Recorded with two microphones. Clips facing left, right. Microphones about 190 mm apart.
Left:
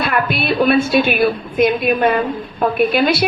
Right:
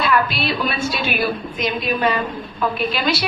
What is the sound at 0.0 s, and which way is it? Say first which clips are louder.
A woman's voice: left 1 dB; 55° left (ahead or behind).